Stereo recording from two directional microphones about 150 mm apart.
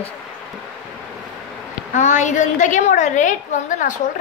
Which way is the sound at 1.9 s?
50° left (ahead or behind).